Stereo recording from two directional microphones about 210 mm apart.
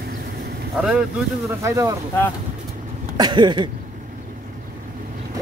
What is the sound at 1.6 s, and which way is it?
Speech, 15° right (ahead or behind).